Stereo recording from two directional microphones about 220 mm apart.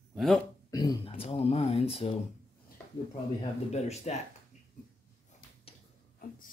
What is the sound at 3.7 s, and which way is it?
Speech, 30° left (ahead or behind).